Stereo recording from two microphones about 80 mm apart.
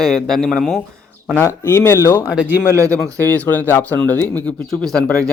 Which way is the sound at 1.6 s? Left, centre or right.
Left.